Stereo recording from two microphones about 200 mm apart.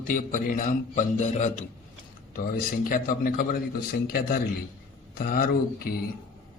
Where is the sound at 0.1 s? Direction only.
45° left (ahead or behind).